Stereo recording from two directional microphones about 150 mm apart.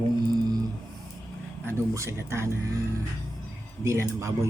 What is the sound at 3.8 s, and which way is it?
Speech, 20° right (ahead or behind).